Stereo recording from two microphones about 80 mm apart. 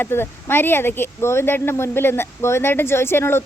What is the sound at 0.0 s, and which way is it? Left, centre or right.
Speech, left.